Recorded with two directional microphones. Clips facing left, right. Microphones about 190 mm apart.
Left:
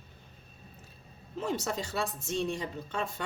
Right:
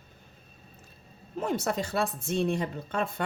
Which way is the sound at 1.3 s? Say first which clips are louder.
Right 4 dB; 55° right (ahead or behind).